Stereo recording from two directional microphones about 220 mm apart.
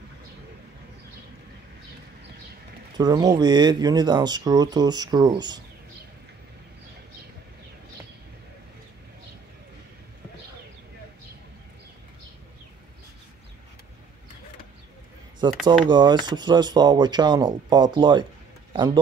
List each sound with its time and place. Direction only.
3.0 s speech: 20° right (ahead or behind)
15.6 s speech: 20° right (ahead or behind)